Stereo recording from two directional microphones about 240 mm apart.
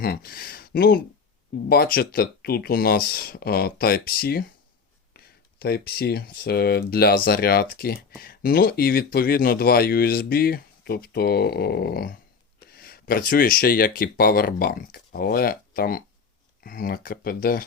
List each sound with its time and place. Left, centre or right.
0.0 s speech: left